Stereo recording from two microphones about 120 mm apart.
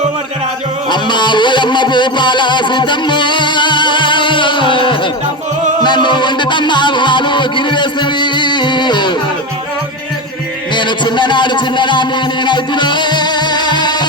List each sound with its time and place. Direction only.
0.9 s music: 40° left (ahead or behind)
10.8 s speech: 40° left (ahead or behind)